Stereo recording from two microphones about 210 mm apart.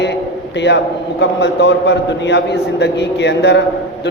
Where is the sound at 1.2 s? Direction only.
55° left (ahead or behind).